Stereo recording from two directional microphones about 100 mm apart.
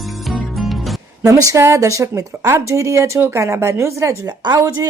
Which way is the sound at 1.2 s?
30° right (ahead or behind).